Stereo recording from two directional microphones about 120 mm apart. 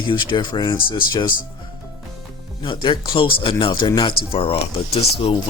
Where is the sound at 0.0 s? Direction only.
45° left (ahead or behind).